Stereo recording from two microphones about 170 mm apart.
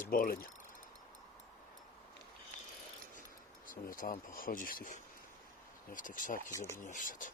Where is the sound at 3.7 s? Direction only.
55° left (ahead or behind).